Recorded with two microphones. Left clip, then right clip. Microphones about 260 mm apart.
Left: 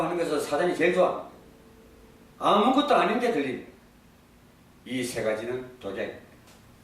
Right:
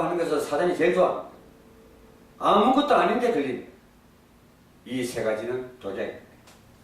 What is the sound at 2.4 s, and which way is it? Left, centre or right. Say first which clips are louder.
Speech: right 2 dB; centre.